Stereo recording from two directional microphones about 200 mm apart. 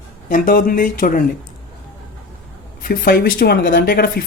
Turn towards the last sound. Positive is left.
turn(degrees=50)  # may be behind; listen again after turning